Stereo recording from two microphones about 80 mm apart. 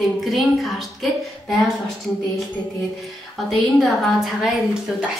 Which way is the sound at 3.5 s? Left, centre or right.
Centre.